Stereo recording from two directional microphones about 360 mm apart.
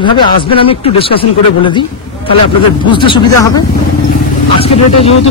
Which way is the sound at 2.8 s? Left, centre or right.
Centre.